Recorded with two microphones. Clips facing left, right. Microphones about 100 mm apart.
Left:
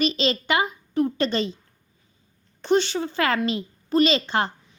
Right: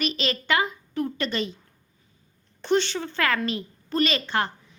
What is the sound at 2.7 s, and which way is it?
A woman's voice, 20° left (ahead or behind).